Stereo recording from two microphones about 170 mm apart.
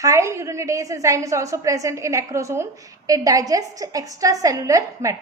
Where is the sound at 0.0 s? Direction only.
20° right (ahead or behind).